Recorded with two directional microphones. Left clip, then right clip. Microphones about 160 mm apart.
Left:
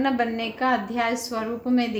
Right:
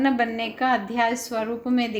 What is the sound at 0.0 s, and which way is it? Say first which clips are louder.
A woman's voice: right 1 dB; 20° right (ahead or behind).